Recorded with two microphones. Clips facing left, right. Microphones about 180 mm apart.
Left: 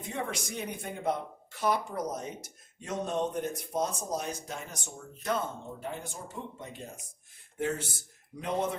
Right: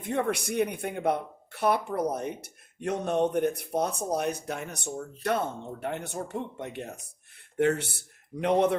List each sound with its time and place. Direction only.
0.0 s speech: 60° right (ahead or behind)